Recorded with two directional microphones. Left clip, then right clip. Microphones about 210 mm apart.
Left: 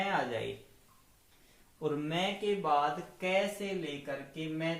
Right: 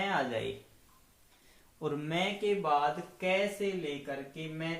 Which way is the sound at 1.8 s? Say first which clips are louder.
Even; 25° right (ahead or behind).